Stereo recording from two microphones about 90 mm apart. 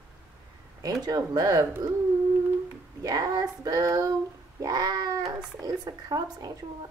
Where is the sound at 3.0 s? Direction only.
45° right (ahead or behind).